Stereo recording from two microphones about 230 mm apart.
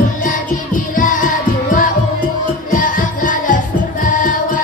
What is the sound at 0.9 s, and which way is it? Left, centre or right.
Music, left.